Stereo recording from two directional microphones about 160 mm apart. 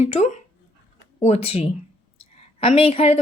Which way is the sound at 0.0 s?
45° left (ahead or behind).